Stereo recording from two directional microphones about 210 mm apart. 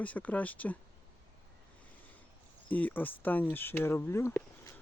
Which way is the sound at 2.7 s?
5° left (ahead or behind).